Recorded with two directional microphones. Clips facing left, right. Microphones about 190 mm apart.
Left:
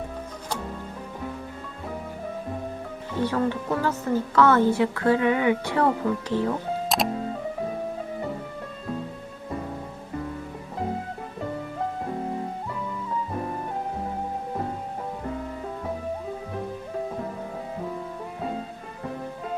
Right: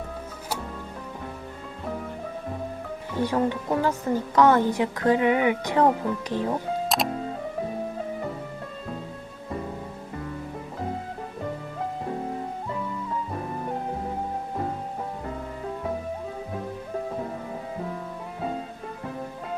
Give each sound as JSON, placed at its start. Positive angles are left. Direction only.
{"t": 3.2, "sound": "speech", "side_deg": -15}
{"t": 6.8, "sound": "music", "side_deg": 0}